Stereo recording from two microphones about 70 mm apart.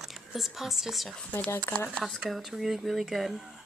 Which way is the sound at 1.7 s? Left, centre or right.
Left.